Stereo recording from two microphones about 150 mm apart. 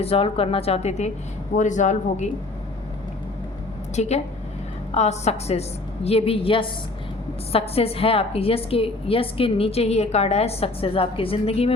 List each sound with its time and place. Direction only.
0.0 s a woman's voice: 40° left (ahead or behind)
3.9 s a woman's voice: 50° left (ahead or behind)